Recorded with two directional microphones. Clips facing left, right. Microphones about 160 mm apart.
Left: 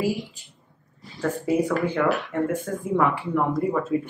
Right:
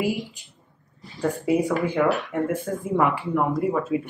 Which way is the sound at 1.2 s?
10° right (ahead or behind).